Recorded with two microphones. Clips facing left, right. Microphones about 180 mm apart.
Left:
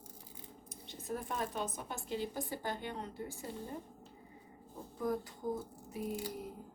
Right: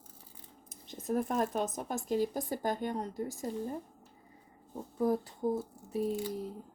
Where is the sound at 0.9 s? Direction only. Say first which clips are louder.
Right 8 dB; 40° right (ahead or behind).